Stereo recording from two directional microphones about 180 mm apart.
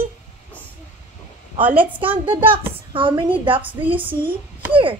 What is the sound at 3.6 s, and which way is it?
Speech, 10° right (ahead or behind).